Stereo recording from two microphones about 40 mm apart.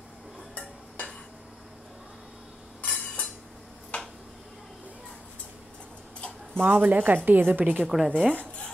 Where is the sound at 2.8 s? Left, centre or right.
Left.